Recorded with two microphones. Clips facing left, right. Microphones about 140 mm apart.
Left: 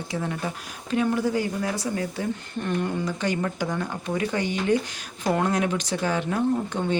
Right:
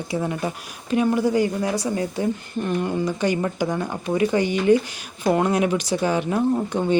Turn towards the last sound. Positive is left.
turn(degrees=-15)  # may be behind; listen again after turning